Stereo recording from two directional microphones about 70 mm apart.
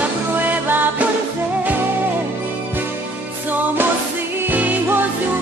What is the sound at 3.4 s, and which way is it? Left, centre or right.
Music, right.